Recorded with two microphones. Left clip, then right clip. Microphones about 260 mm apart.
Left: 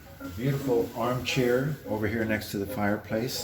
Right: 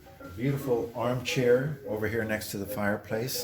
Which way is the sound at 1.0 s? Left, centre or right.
Right.